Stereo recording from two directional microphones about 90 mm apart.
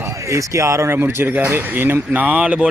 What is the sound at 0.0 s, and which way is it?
Speech, 35° right (ahead or behind).